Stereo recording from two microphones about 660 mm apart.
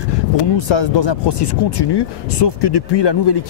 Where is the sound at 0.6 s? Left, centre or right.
Left.